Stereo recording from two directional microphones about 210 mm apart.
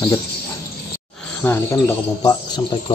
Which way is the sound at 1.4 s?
10° left (ahead or behind).